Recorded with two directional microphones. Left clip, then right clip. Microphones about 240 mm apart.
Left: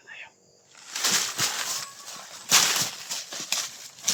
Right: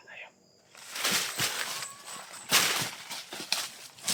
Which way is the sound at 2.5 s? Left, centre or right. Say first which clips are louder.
Left 4 dB; left.